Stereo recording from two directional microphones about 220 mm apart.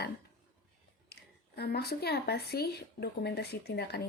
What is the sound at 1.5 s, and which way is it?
Speech, 45° left (ahead or behind).